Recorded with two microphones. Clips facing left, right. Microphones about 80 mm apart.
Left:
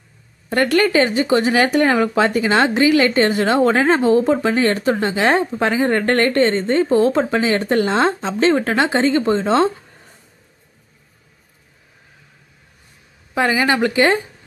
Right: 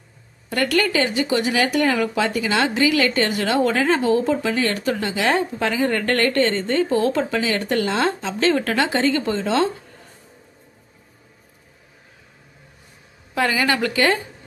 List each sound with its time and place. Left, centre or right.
0.5 s speech: left
13.3 s a woman's voice: left